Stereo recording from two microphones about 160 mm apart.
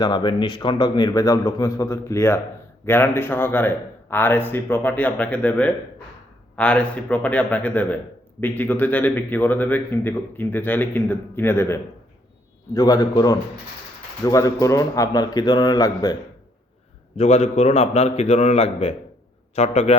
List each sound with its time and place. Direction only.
0.0 s a man's voice: 30° left (ahead or behind)
17.2 s a man's voice: 40° left (ahead or behind)